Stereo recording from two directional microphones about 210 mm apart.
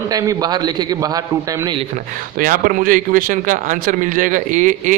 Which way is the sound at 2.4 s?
40° right (ahead or behind).